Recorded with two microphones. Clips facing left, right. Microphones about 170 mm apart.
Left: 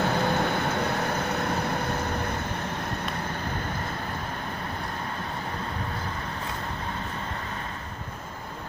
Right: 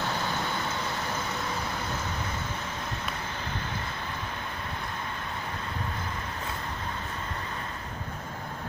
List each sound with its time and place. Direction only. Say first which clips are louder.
0.0 s vehicle: left 7 dB; 55° left (ahead or behind)